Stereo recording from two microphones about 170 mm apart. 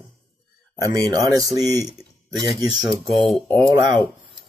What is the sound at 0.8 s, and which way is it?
Speech, 20° right (ahead or behind).